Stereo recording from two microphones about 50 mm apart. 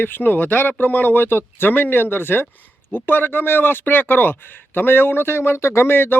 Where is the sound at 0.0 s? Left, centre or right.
Left.